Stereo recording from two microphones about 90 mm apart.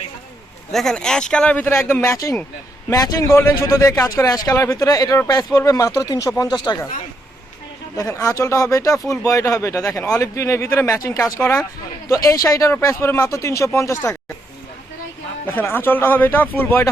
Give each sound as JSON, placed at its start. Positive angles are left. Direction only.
{"t": 0.7, "sound": "speech", "side_deg": 5}
{"t": 1.7, "sound": "a man's voice", "side_deg": 30}
{"t": 7.9, "sound": "a man's voice", "side_deg": 35}
{"t": 15.5, "sound": "speech", "side_deg": 25}